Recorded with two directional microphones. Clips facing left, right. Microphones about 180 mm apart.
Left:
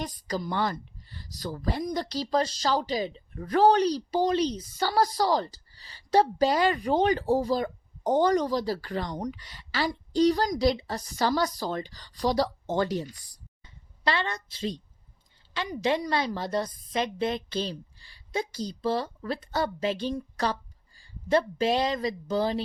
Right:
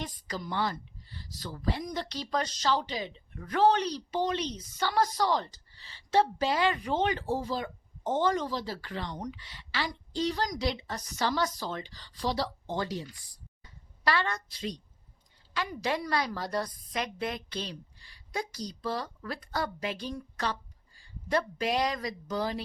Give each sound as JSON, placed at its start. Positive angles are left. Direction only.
{"t": 0.0, "sound": "a woman's voice", "side_deg": 40}
{"t": 14.0, "sound": "a woman's voice", "side_deg": 25}
{"t": 15.8, "sound": "a woman's voice", "side_deg": 20}